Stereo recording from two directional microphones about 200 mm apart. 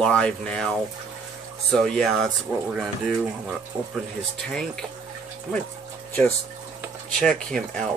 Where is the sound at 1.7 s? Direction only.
Centre (ahead or behind).